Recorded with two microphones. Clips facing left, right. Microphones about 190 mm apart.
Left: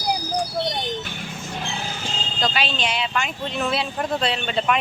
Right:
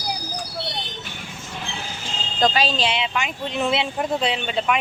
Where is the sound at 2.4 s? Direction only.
40° right (ahead or behind).